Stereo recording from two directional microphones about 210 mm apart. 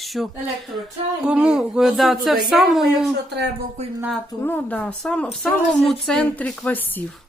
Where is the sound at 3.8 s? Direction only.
30° right (ahead or behind).